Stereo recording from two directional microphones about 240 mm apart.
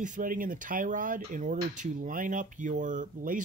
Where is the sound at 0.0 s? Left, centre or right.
Right.